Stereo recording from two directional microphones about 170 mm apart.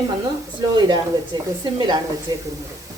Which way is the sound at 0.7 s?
25° right (ahead or behind).